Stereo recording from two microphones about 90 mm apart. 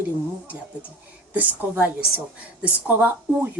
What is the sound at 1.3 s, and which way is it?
A woman's voice, 20° right (ahead or behind).